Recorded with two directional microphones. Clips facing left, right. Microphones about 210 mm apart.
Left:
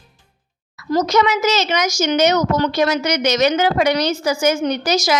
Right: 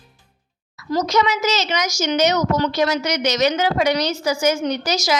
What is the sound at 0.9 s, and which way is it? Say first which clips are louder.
A woman's voice: left 3 dB; 55° left (ahead or behind).